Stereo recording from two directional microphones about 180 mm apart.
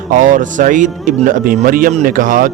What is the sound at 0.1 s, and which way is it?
Speech, 45° right (ahead or behind).